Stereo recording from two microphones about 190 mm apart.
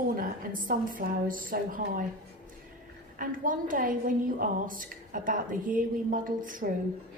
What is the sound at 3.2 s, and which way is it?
A woman's voice, 45° right (ahead or behind).